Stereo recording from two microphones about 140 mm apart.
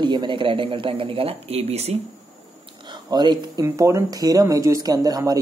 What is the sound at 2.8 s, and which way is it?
Speech, 30° right (ahead or behind).